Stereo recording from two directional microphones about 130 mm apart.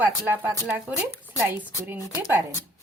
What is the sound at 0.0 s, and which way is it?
Speech, 15° right (ahead or behind).